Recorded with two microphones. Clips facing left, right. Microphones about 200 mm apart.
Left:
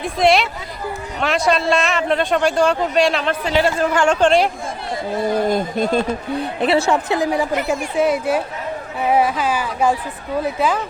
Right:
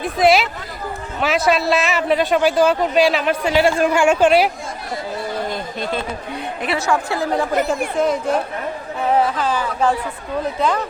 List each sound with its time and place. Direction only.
0.0 s a man's voice: centre (ahead or behind)
5.5 s speech: 50° left (ahead or behind)
6.6 s a man's voice: 30° left (ahead or behind); by 10.8 s 5° left (ahead or behind)